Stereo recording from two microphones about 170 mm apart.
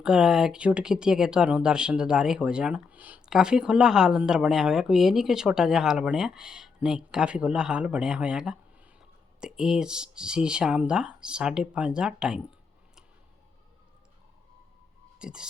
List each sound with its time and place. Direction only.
0.0 s speech: 5° right (ahead or behind)
15.2 s speech: 5° right (ahead or behind)